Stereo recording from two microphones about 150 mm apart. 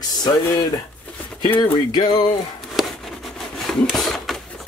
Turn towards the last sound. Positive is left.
turn(degrees=0)  # may be behind; listen again after turning